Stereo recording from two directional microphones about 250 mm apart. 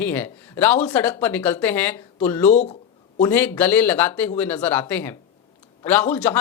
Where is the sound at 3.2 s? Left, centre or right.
Centre.